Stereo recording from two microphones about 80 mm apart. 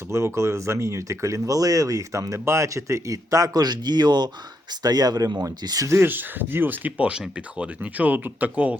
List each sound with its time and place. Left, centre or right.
0.1 s speech: right
5.9 s speech: right